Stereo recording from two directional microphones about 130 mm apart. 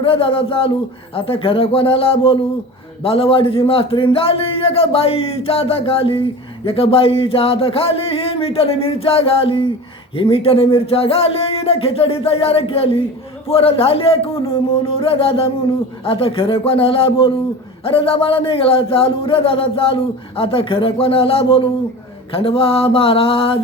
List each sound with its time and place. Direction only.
0.0 s speech: 45° left (ahead or behind)